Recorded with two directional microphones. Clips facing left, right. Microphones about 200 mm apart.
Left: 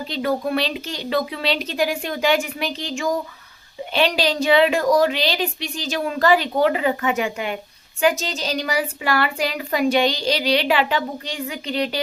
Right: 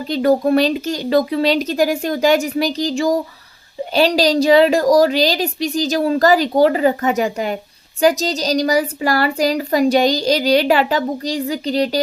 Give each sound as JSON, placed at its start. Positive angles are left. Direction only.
{"t": 0.1, "sound": "a woman's voice", "side_deg": -40}